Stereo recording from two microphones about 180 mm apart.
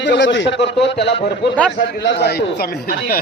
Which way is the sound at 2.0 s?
70° left (ahead or behind).